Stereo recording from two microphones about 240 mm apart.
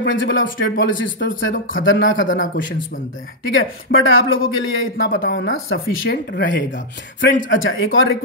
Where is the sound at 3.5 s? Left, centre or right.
Left.